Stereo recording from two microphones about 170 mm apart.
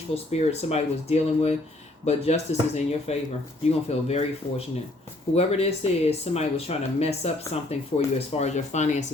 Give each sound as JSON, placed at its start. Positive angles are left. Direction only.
{"t": 0.1, "sound": "speech", "side_deg": 40}